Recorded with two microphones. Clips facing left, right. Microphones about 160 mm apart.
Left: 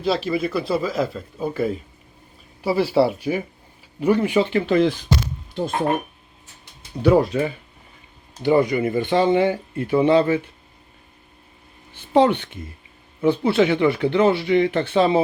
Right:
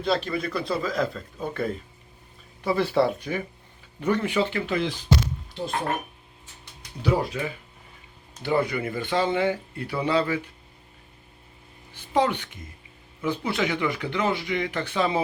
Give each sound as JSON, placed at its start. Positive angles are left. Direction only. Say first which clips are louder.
{"t": 0.0, "sound": "speech", "louder": "left 4 dB", "side_deg": 5}
{"t": 4.7, "sound": "speech", "louder": "left 7 dB", "side_deg": 45}
{"t": 7.0, "sound": "speech", "louder": "left 8 dB", "side_deg": 45}
{"t": 8.4, "sound": "speech", "louder": "left 7 dB", "side_deg": 15}
{"t": 12.1, "sound": "speech", "louder": "left 7 dB", "side_deg": 30}